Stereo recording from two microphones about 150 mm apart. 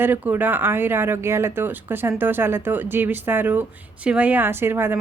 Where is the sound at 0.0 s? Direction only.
10° right (ahead or behind).